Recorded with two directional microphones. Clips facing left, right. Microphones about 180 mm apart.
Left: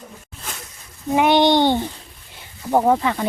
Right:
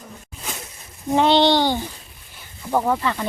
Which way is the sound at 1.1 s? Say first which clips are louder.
Left 1 dB; 15° left (ahead or behind).